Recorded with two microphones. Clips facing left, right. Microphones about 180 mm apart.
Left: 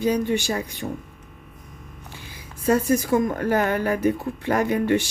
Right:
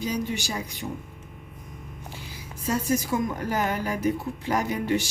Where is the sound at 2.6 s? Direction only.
60° left (ahead or behind).